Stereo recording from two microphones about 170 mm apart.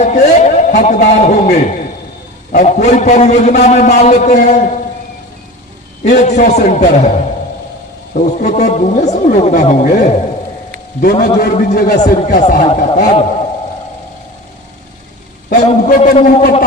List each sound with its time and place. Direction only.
0.0 s a man's voice: 45° left (ahead or behind)
6.1 s a man's voice: 45° left (ahead or behind)
8.1 s a man's voice: 45° left (ahead or behind)
12.6 s a man's voice: 40° left (ahead or behind)
15.4 s a man's voice: 45° left (ahead or behind)